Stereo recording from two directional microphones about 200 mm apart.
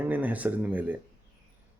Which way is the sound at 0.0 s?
10° right (ahead or behind).